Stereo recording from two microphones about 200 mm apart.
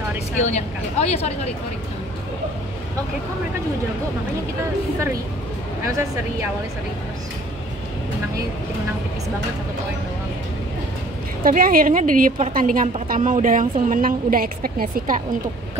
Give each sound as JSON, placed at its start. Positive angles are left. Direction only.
{"t": 0.4, "sound": "speech", "side_deg": 35}
{"t": 5.9, "sound": "speech", "side_deg": -15}
{"t": 11.4, "sound": "a woman's voice", "side_deg": -45}